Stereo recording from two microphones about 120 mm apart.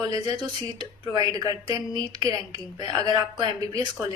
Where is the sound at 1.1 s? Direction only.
35° right (ahead or behind).